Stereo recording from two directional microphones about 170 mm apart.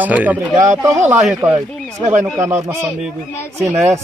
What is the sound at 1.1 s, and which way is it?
Speech, centre (ahead or behind).